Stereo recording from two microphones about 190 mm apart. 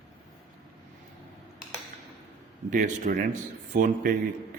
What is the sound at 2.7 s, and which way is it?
A man's voice, 45° right (ahead or behind).